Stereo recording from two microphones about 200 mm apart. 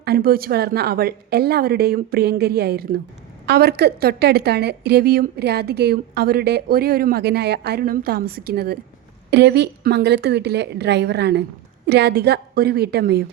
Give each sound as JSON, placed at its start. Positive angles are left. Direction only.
{"t": 0.0, "sound": "a woman's voice", "side_deg": -50}